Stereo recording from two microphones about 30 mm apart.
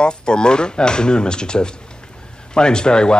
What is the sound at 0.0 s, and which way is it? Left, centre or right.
A man's voice, left.